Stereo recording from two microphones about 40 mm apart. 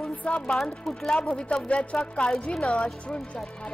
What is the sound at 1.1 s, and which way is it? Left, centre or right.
Speech, left.